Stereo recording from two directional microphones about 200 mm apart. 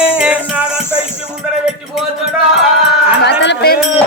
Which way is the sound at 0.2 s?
5° right (ahead or behind).